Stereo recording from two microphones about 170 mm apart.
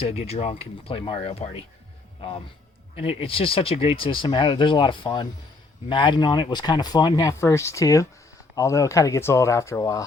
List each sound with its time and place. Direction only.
0.1 s speech: 35° left (ahead or behind)
2.9 s speech: 35° left (ahead or behind)